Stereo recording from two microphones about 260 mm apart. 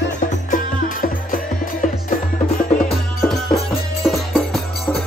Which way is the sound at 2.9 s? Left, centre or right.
Centre.